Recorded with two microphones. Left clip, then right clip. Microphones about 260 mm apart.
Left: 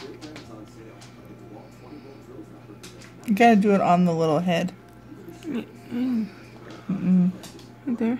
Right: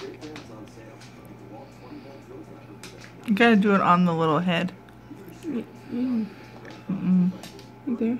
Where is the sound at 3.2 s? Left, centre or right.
Centre.